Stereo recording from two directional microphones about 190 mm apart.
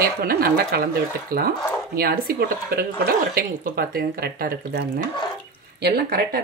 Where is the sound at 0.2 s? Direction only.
55° right (ahead or behind).